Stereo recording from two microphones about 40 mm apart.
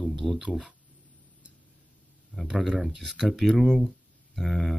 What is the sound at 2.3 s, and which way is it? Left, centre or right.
Speech, centre.